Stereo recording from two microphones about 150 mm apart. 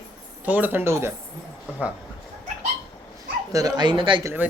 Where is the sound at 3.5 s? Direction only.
25° right (ahead or behind).